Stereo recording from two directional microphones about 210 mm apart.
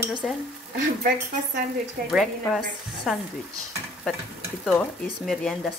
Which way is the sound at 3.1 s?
Centre (ahead or behind).